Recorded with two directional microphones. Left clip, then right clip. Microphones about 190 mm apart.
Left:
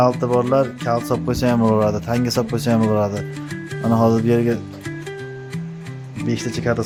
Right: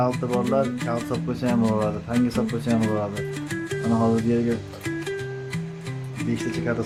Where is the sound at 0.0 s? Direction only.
65° left (ahead or behind).